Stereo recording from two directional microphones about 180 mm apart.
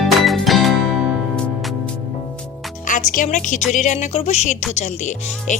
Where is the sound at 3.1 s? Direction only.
50° left (ahead or behind).